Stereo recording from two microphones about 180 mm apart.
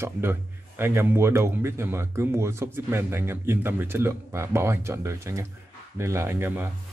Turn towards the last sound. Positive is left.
turn(degrees=-10)  # may be behind; listen again after turning